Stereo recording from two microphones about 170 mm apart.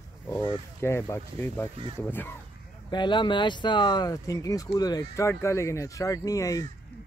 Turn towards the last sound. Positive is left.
turn(degrees=20)  # may be behind; listen again after turning